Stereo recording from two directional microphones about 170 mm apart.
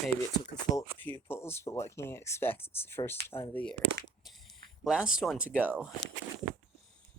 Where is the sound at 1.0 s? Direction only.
10° left (ahead or behind).